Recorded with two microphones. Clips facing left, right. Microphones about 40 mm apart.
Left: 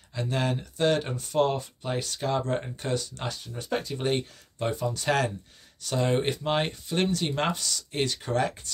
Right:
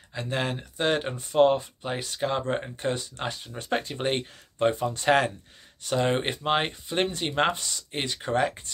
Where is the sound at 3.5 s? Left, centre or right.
Right.